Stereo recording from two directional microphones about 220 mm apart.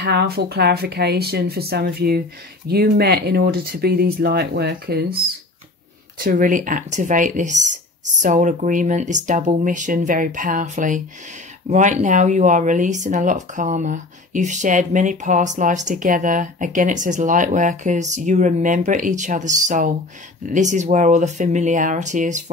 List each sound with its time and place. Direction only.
0.0 s speech: 45° right (ahead or behind)
6.1 s speech: 40° right (ahead or behind)